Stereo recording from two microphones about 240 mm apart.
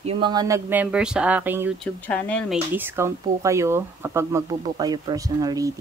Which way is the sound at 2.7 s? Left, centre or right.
Centre.